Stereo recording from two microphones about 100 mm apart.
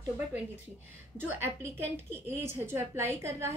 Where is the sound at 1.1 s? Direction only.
20° right (ahead or behind).